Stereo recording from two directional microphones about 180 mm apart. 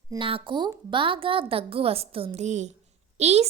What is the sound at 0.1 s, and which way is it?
A woman's voice, 30° right (ahead or behind).